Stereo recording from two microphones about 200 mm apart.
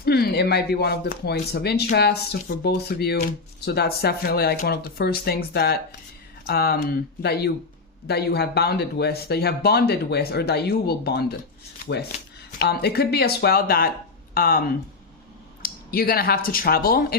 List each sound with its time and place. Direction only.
0.0 s speech: 55° left (ahead or behind)
12.5 s speech: 55° left (ahead or behind)
15.6 s speech: 45° left (ahead or behind)